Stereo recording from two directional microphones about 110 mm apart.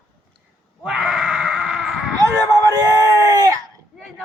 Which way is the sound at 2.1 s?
30° right (ahead or behind).